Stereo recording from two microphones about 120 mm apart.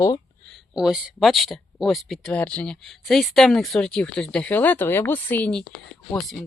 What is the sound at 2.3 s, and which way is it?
Speech, 10° left (ahead or behind).